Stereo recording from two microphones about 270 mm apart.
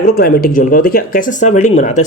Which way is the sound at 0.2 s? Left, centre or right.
Left.